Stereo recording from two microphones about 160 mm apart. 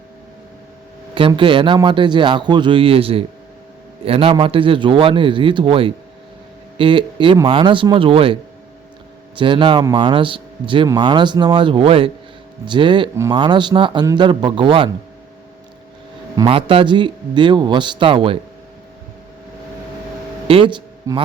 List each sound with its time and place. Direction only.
1.4 s a man's voice: 30° right (ahead or behind)
16.5 s speech: 35° right (ahead or behind)
20.5 s speech: 30° right (ahead or behind)